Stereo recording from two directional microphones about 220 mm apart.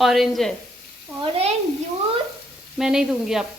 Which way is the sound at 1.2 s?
25° right (ahead or behind).